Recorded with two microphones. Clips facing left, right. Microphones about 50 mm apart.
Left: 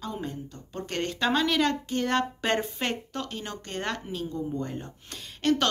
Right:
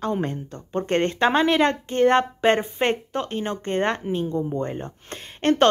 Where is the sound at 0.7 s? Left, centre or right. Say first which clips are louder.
Right 10 dB; right.